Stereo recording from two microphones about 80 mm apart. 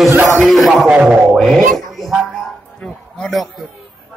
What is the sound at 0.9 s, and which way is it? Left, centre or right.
Speech, centre.